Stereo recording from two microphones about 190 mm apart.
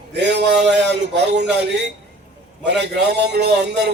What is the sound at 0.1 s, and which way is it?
A man's voice, 65° right (ahead or behind).